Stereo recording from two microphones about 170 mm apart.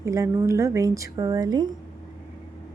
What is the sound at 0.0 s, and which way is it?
A woman's voice, 20° right (ahead or behind).